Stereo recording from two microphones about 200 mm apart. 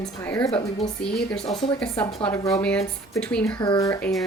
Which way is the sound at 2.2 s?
15° left (ahead or behind).